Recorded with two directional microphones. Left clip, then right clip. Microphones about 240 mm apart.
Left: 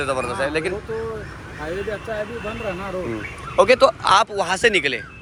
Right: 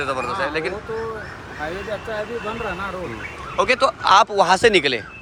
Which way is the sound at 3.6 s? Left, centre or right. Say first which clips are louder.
Left 4 dB; centre.